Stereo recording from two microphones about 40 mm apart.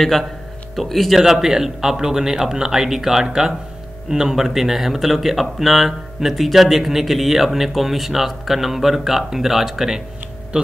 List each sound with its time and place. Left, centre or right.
0.0 s a man's voice: centre; by 10.7 s right